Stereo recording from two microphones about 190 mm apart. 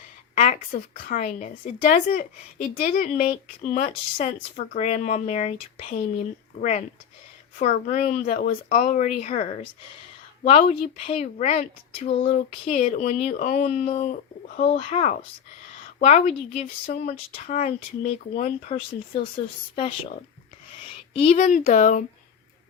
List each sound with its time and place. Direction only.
0.3 s a woman's voice: 40° left (ahead or behind)
6.6 s a woman's voice: 40° left (ahead or behind)
12.5 s a woman's voice: 40° left (ahead or behind)
14.8 s speech: 30° left (ahead or behind)
16.0 s a woman's voice: 40° left (ahead or behind)
20.8 s speech: 30° left (ahead or behind)